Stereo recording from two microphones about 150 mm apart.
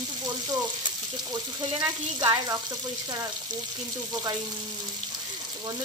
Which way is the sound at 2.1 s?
25° right (ahead or behind).